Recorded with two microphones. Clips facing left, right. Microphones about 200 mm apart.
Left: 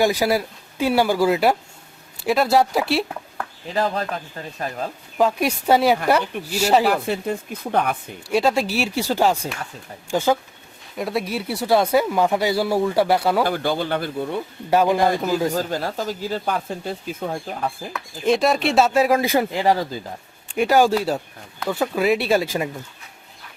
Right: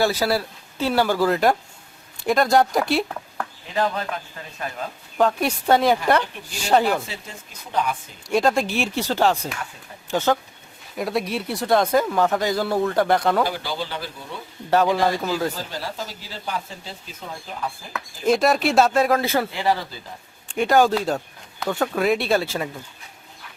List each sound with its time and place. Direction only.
0.0 s speech: 15° left (ahead or behind)
3.8 s speech: 35° left (ahead or behind)
5.1 s speech: 5° left (ahead or behind)
7.0 s speech: 60° left (ahead or behind)
8.3 s speech: 5° left (ahead or behind)
13.4 s speech: 55° left (ahead or behind)
14.7 s speech: 10° left (ahead or behind)
15.5 s speech: 50° left (ahead or behind)
17.9 s speech: centre (ahead or behind); by 19.5 s 15° left (ahead or behind)
19.5 s speech: 40° left (ahead or behind)
20.6 s speech: 10° left (ahead or behind)